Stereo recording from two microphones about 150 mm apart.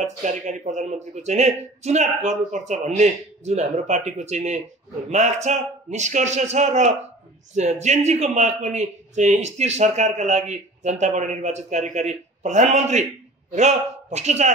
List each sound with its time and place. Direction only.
0.0 s a man's voice: 55° right (ahead or behind)